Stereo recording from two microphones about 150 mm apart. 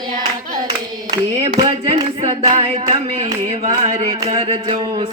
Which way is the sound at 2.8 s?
25° right (ahead or behind).